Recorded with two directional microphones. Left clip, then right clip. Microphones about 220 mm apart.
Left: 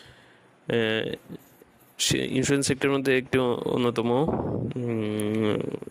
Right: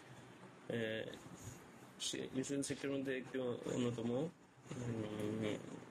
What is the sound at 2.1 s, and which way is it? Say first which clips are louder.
Speech: left 18 dB; 50° left (ahead or behind).